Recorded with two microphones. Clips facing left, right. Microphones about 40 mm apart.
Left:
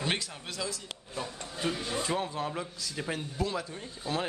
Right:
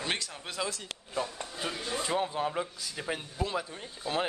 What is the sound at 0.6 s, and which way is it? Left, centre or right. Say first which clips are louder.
Speech: right 3 dB; right.